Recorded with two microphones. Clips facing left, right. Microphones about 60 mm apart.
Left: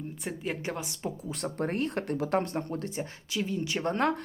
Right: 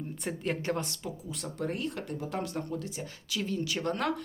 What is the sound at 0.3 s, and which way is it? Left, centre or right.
Speech, centre.